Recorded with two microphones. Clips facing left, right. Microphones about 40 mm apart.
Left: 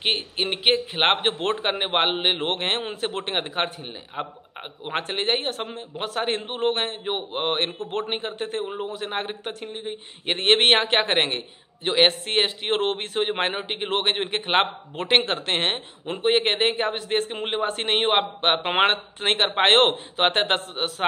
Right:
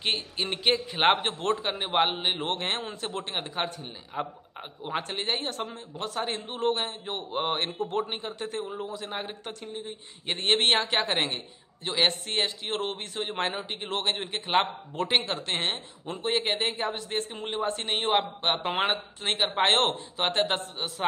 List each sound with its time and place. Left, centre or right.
0.0 s a man's voice: left
7.1 s a man's voice: left
7.9 s speech: left